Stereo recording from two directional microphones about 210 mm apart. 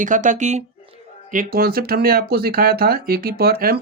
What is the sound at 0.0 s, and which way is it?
Speech, 40° right (ahead or behind).